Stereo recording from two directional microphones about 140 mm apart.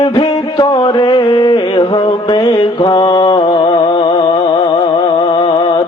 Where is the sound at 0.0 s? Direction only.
30° left (ahead or behind).